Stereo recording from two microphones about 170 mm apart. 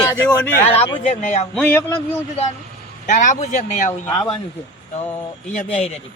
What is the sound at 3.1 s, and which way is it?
Speech, 45° left (ahead or behind).